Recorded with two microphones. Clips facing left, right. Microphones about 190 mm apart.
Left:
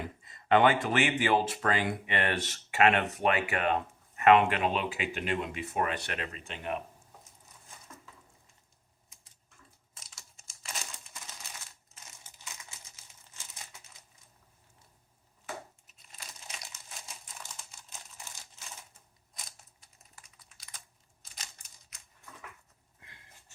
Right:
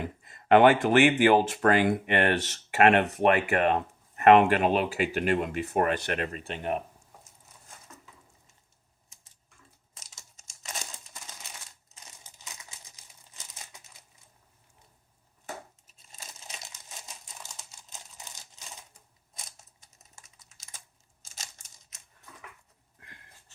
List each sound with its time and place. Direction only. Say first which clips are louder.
0.2 s speech: right 5 dB; 50° right (ahead or behind)
16.1 s crumpling: right 1 dB; 25° right (ahead or behind)
17.9 s computer keyboard: right 1 dB; 20° right (ahead or behind)
21.3 s a sound: right 2 dB; 25° right (ahead or behind)